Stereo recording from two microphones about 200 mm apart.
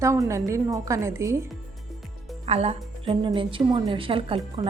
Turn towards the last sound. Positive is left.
turn(degrees=-25)  # may be behind; listen again after turning